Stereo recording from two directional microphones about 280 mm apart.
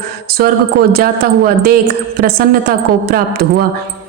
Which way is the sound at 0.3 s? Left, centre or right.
Right.